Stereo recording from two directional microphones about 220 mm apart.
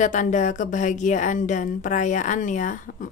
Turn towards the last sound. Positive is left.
turn(degrees=35)  # may be behind; listen again after turning